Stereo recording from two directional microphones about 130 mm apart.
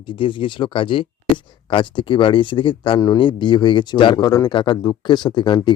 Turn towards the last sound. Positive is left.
turn(degrees=35)  # may be behind; listen again after turning